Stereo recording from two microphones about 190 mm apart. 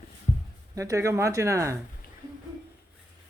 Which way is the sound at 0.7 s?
15° right (ahead or behind).